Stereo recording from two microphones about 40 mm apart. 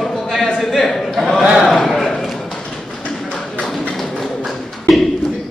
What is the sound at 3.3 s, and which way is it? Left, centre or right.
Tap, left.